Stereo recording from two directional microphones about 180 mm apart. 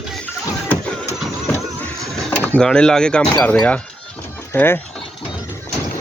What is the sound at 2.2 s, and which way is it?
Speech, 5° left (ahead or behind).